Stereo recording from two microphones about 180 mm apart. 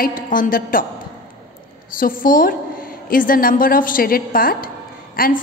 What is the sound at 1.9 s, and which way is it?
A woman's voice, 50° left (ahead or behind).